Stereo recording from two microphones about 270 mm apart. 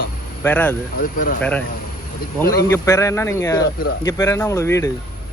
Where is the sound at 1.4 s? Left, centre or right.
Centre.